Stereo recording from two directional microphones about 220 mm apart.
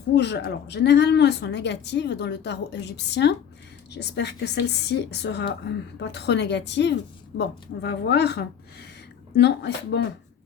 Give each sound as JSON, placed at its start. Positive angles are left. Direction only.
{"t": 0.1, "sound": "speech", "side_deg": 50}